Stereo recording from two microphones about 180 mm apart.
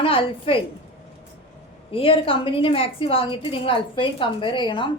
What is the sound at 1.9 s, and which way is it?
A woman's voice, 30° left (ahead or behind).